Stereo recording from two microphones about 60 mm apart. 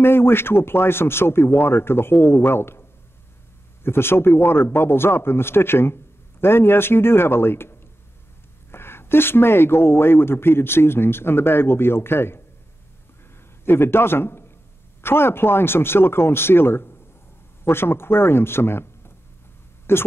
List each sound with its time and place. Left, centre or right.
0.0 s speech: left
8.7 s speech: left
13.7 s speech: left